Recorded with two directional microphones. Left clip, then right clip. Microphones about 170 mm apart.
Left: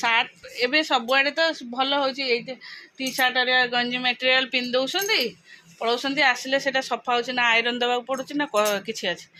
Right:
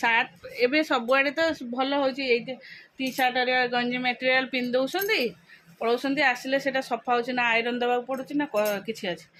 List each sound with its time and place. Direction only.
0.0 s speech: 25° right (ahead or behind); by 9.1 s centre (ahead or behind)